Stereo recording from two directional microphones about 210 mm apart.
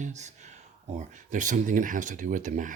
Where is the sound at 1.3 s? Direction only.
35° right (ahead or behind).